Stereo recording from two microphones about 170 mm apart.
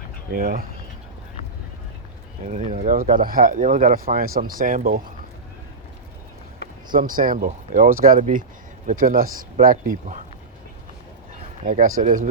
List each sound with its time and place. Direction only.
0.3 s speech: 55° right (ahead or behind)
2.5 s speech: 45° right (ahead or behind)
6.9 s speech: 55° right (ahead or behind)
11.6 s speech: 50° right (ahead or behind)